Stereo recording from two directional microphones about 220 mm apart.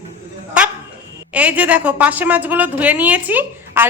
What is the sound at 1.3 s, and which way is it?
A woman's voice, 5° right (ahead or behind).